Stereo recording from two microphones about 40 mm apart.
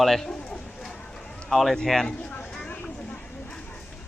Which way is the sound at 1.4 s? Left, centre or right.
Centre.